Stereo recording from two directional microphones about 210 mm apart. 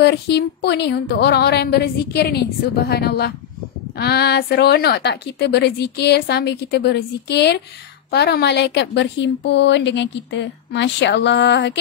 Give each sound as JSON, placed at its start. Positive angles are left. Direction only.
{"t": 0.0, "sound": "a woman's voice", "side_deg": 50}